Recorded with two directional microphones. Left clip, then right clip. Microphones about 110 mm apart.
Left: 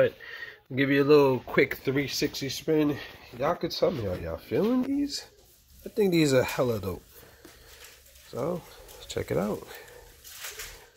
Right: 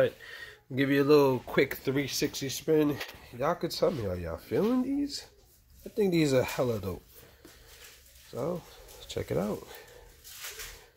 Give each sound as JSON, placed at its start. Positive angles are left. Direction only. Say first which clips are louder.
{"t": 0.0, "sound": "speech", "louder": "left 3 dB", "side_deg": -15}
{"t": 3.3, "sound": "speech", "louder": "left 2 dB", "side_deg": -10}
{"t": 8.3, "sound": "speech", "louder": "left 3 dB", "side_deg": 0}